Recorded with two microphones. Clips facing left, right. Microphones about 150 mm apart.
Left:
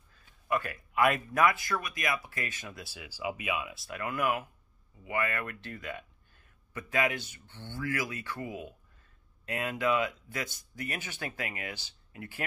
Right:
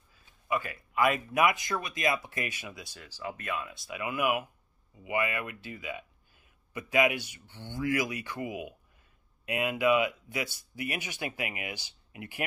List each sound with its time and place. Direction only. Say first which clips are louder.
0.1 s a sound: even; centre (ahead or behind)
1.3 s speech: even; 15° right (ahead or behind)
2.7 s speech: left 1 dB; 5° left (ahead or behind); by 12.4 s 15° right (ahead or behind)